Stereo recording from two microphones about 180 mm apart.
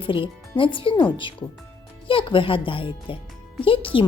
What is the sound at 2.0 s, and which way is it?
Speech, 30° left (ahead or behind).